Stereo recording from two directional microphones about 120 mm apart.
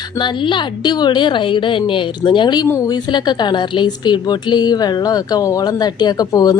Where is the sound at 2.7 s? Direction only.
25° left (ahead or behind).